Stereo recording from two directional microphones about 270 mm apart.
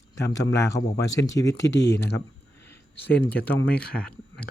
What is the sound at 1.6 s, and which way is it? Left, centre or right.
Speech, left.